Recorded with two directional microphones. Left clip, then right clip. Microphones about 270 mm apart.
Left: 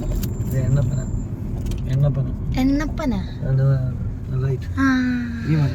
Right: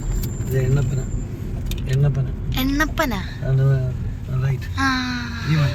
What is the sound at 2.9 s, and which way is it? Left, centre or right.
Speech, right.